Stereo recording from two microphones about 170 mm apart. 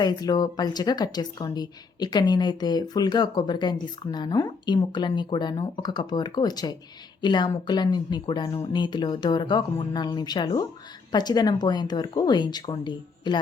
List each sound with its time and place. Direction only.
0.0 s a woman's voice: 25° left (ahead or behind)